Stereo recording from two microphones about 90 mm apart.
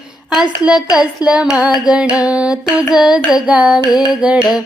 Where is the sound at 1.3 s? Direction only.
10° right (ahead or behind).